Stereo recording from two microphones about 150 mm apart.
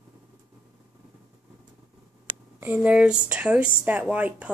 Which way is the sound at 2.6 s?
10° right (ahead or behind).